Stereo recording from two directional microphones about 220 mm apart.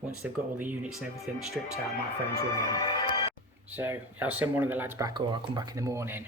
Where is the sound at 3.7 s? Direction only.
10° right (ahead or behind).